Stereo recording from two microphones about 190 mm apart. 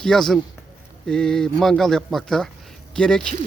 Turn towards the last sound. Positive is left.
turn(degrees=5)  # may be behind; listen again after turning